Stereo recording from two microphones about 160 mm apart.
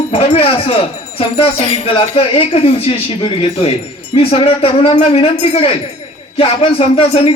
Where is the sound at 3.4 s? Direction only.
40° left (ahead or behind).